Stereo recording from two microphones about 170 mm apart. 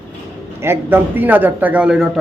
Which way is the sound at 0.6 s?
15° right (ahead or behind).